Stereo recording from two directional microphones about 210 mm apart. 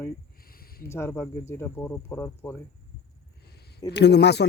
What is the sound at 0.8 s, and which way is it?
Speech, 10° left (ahead or behind).